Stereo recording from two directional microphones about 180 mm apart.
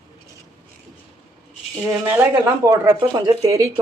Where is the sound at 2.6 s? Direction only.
20° right (ahead or behind).